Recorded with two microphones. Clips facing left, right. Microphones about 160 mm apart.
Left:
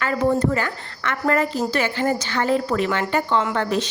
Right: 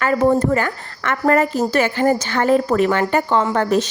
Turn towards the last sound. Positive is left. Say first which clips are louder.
# right 5 dB
turn(degrees=-45)  # may be behind; listen again after turning